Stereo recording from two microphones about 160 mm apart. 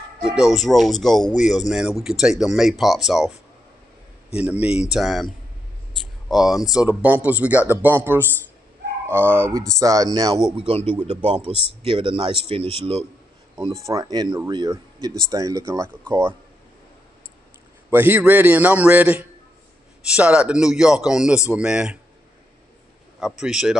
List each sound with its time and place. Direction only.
0.2 s speech: 5° right (ahead or behind)
4.4 s a man's voice: 5° right (ahead or behind); by 10.4 s 20° right (ahead or behind)
10.7 s speech: 35° right (ahead or behind)
13.8 s a man's voice: 20° right (ahead or behind)
17.8 s a man's voice: 15° right (ahead or behind)
23.4 s speech: 5° right (ahead or behind)